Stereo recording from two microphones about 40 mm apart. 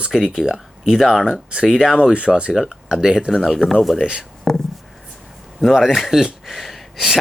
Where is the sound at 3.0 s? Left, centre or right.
Centre.